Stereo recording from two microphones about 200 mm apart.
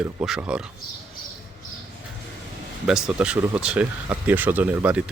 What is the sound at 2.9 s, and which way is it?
Speech, 5° right (ahead or behind).